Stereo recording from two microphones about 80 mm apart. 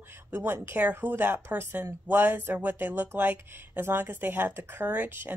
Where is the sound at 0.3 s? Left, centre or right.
Right.